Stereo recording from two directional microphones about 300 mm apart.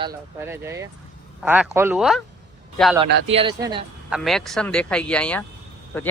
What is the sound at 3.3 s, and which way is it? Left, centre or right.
Speech, centre.